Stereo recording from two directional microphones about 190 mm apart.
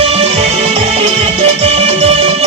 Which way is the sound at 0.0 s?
30° right (ahead or behind).